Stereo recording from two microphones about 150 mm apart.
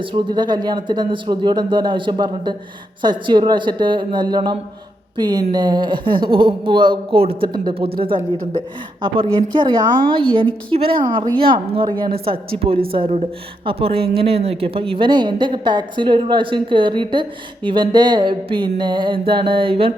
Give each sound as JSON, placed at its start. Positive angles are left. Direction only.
{"t": 0.0, "sound": "speech", "side_deg": -30}